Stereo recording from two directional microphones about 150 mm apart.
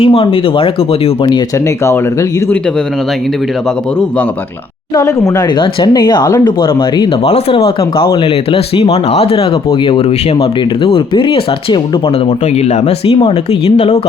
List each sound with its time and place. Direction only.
0.0 s speech: 40° left (ahead or behind)
4.9 s speech: 25° left (ahead or behind)
7.3 s speech: 40° left (ahead or behind)